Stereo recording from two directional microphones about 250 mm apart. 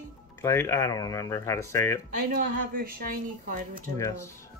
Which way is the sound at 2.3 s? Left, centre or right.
Right.